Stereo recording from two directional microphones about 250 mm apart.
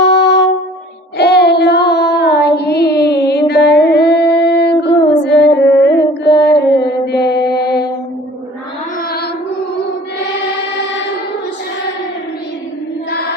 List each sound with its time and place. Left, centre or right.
0.0 s music: left
1.2 s child singing: left
2.6 s music: left
6.2 s mantra: left
9.0 s music: left
13.1 s choir: left